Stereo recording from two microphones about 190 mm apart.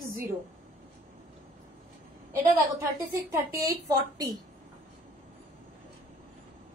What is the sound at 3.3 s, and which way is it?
A woman's voice, 15° right (ahead or behind).